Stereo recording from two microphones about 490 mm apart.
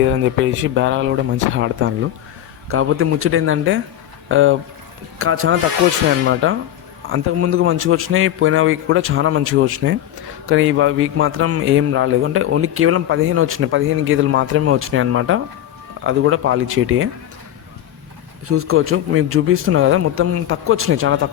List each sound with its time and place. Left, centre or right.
0.1 s a man's voice: right
18.4 s a man's voice: right